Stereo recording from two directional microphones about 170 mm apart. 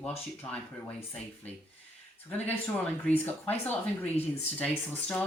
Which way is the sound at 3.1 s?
10° left (ahead or behind).